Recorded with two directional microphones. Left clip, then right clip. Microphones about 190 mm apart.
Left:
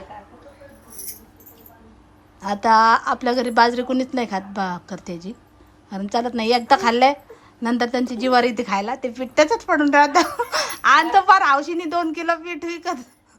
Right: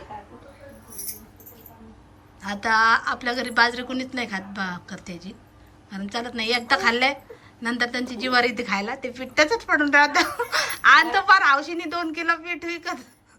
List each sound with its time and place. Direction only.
2.4 s a woman's voice: 20° left (ahead or behind)